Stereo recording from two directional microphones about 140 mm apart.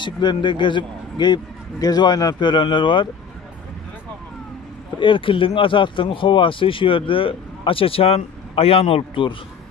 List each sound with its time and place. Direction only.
0.0 s speech: 35° left (ahead or behind)
4.9 s speech: 35° left (ahead or behind)